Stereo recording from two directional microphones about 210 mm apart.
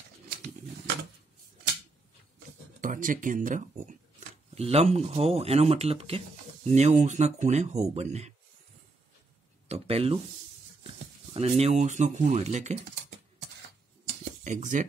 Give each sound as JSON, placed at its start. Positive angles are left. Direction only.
{"t": 2.8, "sound": "speech", "side_deg": -40}
{"t": 9.7, "sound": "speech", "side_deg": -30}
{"t": 11.3, "sound": "speech", "side_deg": -30}
{"t": 14.4, "sound": "speech", "side_deg": -35}